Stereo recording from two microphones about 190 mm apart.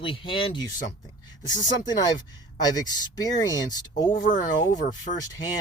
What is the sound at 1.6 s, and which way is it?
Speech, 20° left (ahead or behind).